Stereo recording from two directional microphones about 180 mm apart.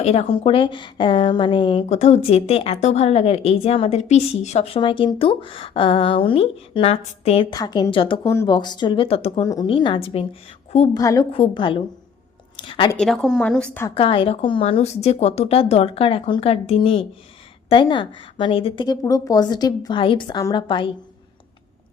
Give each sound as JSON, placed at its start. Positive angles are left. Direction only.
{"t": 0.0, "sound": "a woman's voice", "side_deg": 35}
{"t": 10.9, "sound": "a woman's voice", "side_deg": 20}
{"t": 12.5, "sound": "a sound", "side_deg": 30}
{"t": 13.0, "sound": "a woman's voice", "side_deg": 0}
{"t": 13.9, "sound": "a woman's voice", "side_deg": 30}